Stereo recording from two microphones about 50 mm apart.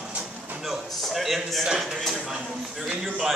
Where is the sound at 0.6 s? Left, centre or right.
Centre.